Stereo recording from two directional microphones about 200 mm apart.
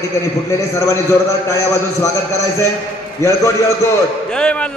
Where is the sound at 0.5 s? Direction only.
15° left (ahead or behind).